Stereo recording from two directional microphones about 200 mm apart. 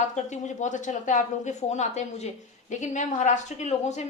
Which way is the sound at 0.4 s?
35° left (ahead or behind).